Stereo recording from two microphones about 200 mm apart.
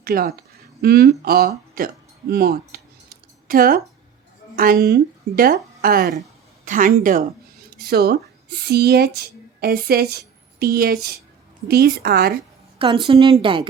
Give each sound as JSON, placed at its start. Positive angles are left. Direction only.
{"t": 0.0, "sound": "speech", "side_deg": -50}
{"t": 2.3, "sound": "a sound", "side_deg": -50}
{"t": 4.5, "sound": "speech", "side_deg": -50}
{"t": 12.8, "sound": "a woman's voice", "side_deg": -25}